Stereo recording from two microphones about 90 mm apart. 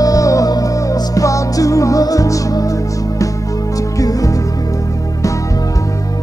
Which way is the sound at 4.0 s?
40° left (ahead or behind).